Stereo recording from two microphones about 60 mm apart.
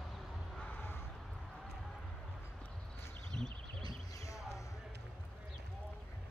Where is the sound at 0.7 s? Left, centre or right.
Left.